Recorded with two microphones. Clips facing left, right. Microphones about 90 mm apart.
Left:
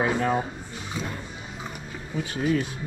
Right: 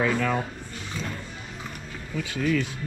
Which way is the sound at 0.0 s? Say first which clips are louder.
Left 1 dB; 25° left (ahead or behind).